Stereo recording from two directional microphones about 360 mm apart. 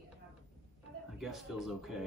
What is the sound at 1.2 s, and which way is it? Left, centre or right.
Speech, centre.